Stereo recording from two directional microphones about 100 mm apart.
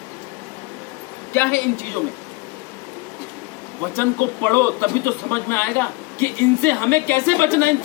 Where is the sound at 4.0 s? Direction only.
20° left (ahead or behind).